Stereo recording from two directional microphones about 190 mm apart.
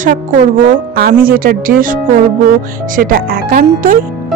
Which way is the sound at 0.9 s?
50° right (ahead or behind).